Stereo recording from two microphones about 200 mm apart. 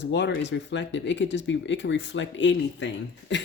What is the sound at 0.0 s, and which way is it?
Speech, 60° left (ahead or behind).